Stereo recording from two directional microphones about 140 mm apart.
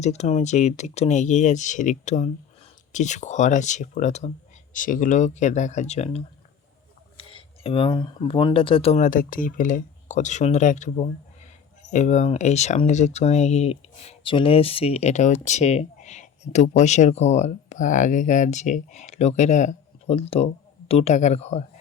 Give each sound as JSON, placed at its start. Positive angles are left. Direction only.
{"t": 0.0, "sound": "speech", "side_deg": 50}
{"t": 4.7, "sound": "speech", "side_deg": 70}
{"t": 7.2, "sound": "speech", "side_deg": 40}
{"t": 9.0, "sound": "speech", "side_deg": 75}